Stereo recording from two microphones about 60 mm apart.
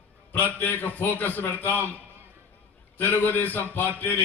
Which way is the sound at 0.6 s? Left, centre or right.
Left.